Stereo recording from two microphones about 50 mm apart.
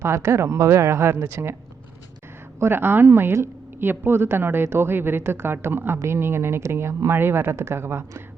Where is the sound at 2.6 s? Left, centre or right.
Right.